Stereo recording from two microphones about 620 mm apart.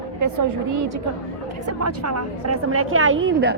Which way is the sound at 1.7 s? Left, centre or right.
Right.